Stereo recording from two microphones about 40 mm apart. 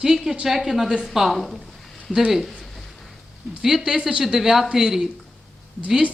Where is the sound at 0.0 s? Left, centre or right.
Centre.